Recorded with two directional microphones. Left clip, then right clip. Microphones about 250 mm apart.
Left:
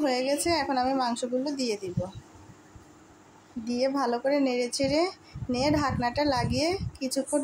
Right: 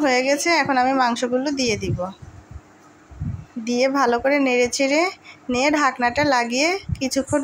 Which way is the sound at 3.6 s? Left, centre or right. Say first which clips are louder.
Right 9 dB; centre.